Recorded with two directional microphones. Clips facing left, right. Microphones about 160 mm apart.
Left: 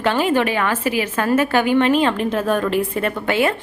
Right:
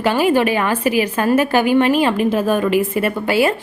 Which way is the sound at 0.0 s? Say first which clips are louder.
Right 3 dB; 10° right (ahead or behind).